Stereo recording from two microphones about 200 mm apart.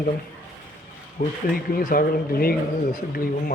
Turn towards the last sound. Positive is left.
turn(degrees=45)  # may be behind; listen again after turning